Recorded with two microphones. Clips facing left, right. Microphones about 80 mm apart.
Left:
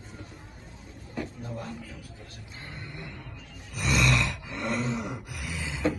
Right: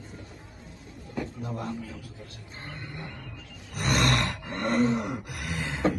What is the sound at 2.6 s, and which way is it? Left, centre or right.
Wild animals, right.